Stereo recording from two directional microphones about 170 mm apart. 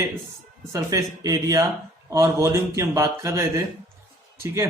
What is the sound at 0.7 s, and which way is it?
A man's voice, 20° right (ahead or behind).